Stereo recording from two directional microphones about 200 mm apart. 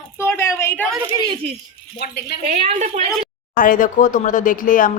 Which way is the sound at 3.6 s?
40° left (ahead or behind).